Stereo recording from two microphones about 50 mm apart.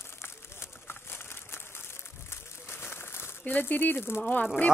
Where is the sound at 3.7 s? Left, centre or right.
Left.